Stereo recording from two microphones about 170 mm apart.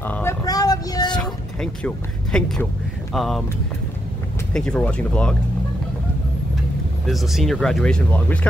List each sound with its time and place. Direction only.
0.0 s a sound: 15° left (ahead or behind)
1.1 s music: 5° left (ahead or behind)
3.1 s speech: centre (ahead or behind)
4.6 s speech: 5° left (ahead or behind)
7.1 s speech: centre (ahead or behind)